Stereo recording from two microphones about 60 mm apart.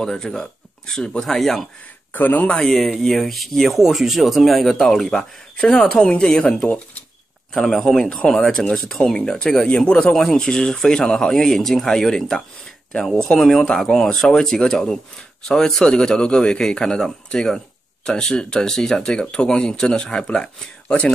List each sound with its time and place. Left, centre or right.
0.0 s speech: centre
2.1 s speech: left
2.6 s speech: centre
6.4 s speech: left
7.5 s speech: centre